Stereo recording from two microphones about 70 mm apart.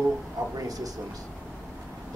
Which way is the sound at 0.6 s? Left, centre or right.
Right.